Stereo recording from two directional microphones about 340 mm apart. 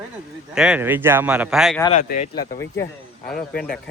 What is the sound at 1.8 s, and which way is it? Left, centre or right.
A man's voice, centre.